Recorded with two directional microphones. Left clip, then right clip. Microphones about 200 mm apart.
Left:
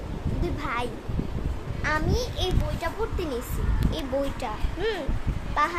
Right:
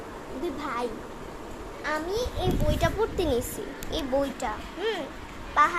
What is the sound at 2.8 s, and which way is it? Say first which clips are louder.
Speech: right 4 dB; 20° right (ahead or behind).